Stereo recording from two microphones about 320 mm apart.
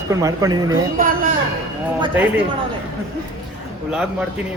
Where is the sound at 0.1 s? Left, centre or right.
Centre.